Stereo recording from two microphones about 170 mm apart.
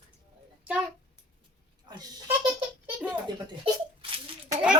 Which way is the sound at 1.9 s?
25° right (ahead or behind).